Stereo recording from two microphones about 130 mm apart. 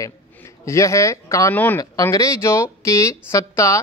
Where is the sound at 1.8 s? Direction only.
25° left (ahead or behind).